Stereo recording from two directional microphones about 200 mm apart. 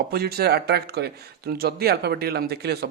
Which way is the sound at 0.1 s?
50° right (ahead or behind).